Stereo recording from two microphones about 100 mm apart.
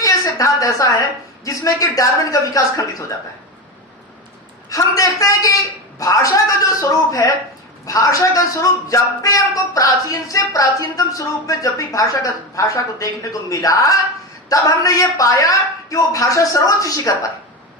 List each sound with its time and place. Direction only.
0.0 s a sound: 35° left (ahead or behind)
1.5 s a man's voice: 35° left (ahead or behind)
4.7 s a man's voice: 35° left (ahead or behind)